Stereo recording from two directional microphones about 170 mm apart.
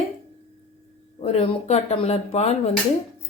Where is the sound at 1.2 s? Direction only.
35° left (ahead or behind).